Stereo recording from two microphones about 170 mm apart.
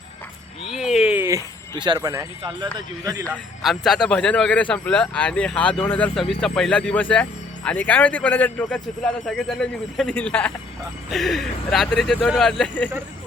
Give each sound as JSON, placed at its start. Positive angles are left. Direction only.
{"t": 0.7, "sound": "a sound", "side_deg": 0}
{"t": 1.7, "sound": "a man's voice", "side_deg": -25}
{"t": 3.6, "sound": "speech", "side_deg": 0}